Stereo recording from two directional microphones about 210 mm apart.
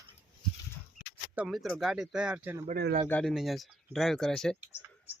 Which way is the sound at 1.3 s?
Centre (ahead or behind).